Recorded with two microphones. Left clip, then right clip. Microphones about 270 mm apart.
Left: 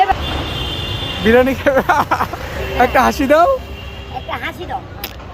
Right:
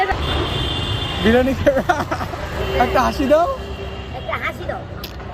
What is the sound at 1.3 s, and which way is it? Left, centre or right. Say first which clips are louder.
Speech: left 4 dB; centre.